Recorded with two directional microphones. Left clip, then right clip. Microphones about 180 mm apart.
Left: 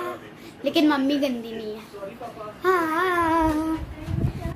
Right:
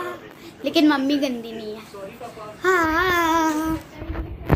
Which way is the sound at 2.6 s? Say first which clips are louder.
Right 3 dB; 10° right (ahead or behind).